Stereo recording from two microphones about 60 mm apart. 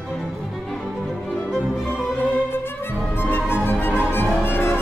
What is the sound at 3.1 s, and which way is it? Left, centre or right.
Music, left.